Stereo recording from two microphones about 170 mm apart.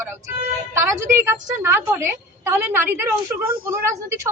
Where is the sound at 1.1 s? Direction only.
15° right (ahead or behind).